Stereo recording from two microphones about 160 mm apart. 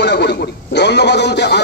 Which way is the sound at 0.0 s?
90° left.